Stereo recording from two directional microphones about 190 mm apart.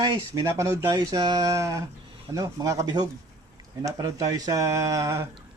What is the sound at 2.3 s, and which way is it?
Speech, 15° right (ahead or behind).